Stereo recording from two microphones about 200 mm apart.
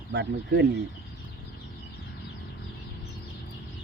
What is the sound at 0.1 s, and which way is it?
Speech, 60° right (ahead or behind).